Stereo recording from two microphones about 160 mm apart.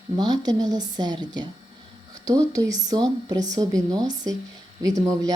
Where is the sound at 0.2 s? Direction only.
25° right (ahead or behind).